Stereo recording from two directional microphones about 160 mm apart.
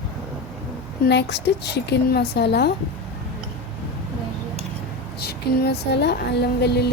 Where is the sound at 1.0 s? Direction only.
90° left.